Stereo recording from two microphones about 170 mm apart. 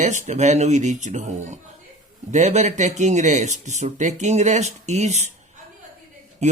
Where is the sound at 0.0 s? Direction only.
45° right (ahead or behind).